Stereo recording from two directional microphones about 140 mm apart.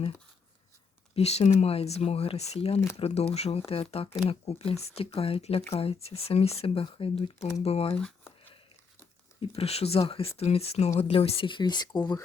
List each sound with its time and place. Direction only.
1.1 s speech: 50° left (ahead or behind)
7.9 s speech: 5° left (ahead or behind)
9.4 s speech: 45° left (ahead or behind); by 12.2 s 30° left (ahead or behind)